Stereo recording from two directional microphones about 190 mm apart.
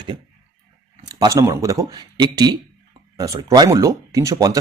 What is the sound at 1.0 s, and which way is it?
Speech, 20° right (ahead or behind).